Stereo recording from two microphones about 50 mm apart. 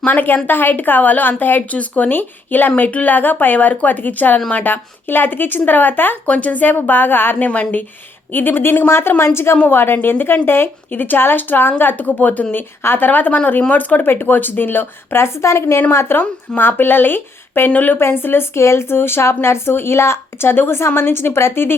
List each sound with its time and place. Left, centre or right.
0.0 s speech: left
6.2 s speech: left
7.3 s speech: left
8.9 s a woman's voice: left
9.6 s speech: left
15.4 s a woman's voice: left
15.9 s a woman's voice: left
16.6 s speech: left
18.0 s speech: left
18.6 s a woman's voice: left